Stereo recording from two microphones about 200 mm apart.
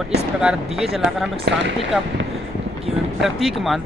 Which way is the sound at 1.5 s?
55° right (ahead or behind).